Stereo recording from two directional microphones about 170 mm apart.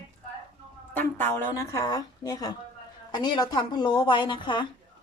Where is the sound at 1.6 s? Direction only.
20° left (ahead or behind).